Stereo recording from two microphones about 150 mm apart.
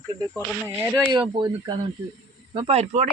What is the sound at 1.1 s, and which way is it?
Speech, 35° right (ahead or behind).